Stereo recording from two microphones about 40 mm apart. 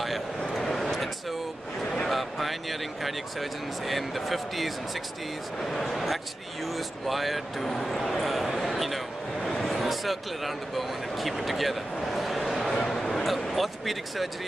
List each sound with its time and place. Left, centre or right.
0.4 s vehicle: centre
0.7 s vehicle: centre
2.0 s a man's voice: centre
12.8 s a sound: centre